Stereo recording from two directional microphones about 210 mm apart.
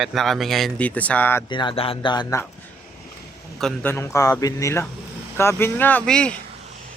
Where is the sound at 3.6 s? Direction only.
5° left (ahead or behind).